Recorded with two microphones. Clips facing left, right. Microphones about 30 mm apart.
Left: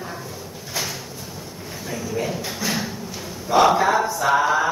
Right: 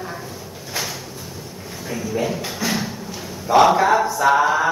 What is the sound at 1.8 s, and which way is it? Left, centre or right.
A woman's voice, centre.